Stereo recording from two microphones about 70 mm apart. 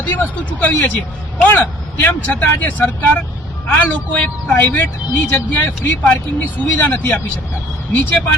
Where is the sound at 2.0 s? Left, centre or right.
Left.